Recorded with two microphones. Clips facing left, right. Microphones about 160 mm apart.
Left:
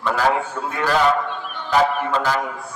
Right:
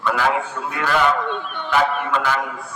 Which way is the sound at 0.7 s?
35° left (ahead or behind).